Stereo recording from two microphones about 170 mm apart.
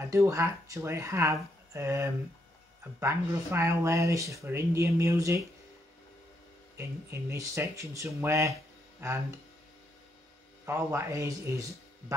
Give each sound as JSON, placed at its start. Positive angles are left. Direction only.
{"t": 0.1, "sound": "speech", "side_deg": -15}
{"t": 6.8, "sound": "speech", "side_deg": -15}
{"t": 10.6, "sound": "speech", "side_deg": -15}